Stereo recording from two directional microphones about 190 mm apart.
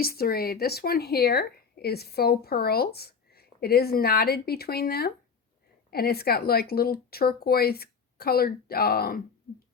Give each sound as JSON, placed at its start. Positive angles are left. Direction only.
{"t": 0.0, "sound": "a woman's voice", "side_deg": 50}